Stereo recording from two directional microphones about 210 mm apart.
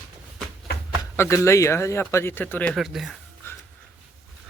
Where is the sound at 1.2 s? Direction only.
15° left (ahead or behind).